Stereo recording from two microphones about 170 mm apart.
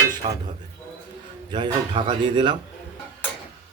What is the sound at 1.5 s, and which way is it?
Speech, 30° right (ahead or behind).